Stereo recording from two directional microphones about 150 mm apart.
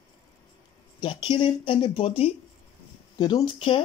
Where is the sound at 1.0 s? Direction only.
35° left (ahead or behind).